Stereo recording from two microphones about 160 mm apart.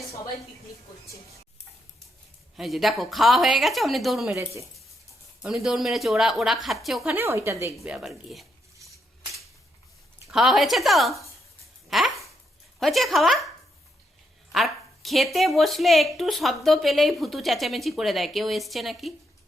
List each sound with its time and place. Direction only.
2.6 s speech: centre (ahead or behind)
5.4 s speech: 5° right (ahead or behind)
7.1 s a woman's voice: 15° right (ahead or behind)
7.9 s speech: 5° right (ahead or behind)
10.2 s speech: centre (ahead or behind)
11.9 s a sound: centre (ahead or behind)
12.8 s speech: centre (ahead or behind)
14.5 s speech: centre (ahead or behind)